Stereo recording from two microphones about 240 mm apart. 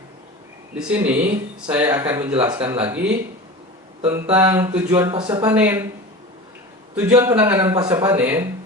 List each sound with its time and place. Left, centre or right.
0.8 s speech: centre
2.3 s speech: right
2.6 s speech: centre
6.9 s speech: centre